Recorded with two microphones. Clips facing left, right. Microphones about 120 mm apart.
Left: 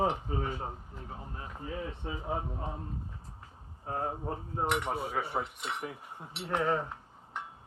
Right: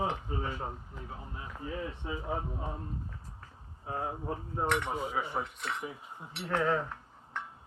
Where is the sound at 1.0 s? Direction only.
35° left (ahead or behind).